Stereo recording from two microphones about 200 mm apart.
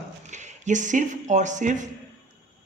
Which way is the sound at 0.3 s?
35° right (ahead or behind).